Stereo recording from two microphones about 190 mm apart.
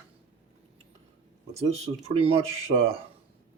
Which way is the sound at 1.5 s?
35° right (ahead or behind).